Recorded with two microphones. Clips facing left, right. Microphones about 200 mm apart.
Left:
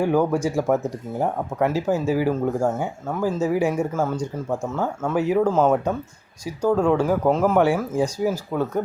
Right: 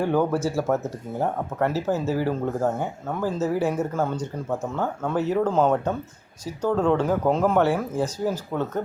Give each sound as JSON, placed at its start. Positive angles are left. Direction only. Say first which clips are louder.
{"t": 0.0, "sound": "speech", "louder": "left 2 dB", "side_deg": 10}
{"t": 7.6, "sound": "speech", "louder": "left 3 dB", "side_deg": 15}